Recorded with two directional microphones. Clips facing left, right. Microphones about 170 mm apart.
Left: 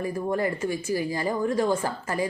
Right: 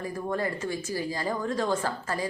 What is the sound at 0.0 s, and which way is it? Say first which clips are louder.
A woman's voice: left 4 dB; 15° left (ahead or behind).